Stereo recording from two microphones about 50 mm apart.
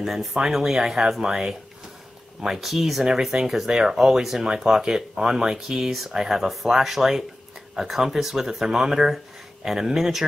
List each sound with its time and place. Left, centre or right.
0.0 s speech: centre